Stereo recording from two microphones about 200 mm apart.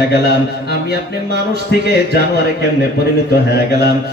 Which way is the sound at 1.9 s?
55° left (ahead or behind).